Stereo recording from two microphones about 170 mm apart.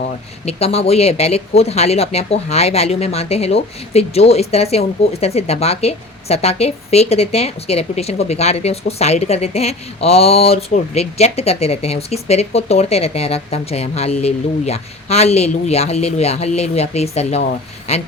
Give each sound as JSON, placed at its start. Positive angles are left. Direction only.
{"t": 0.4, "sound": "speech", "side_deg": 35}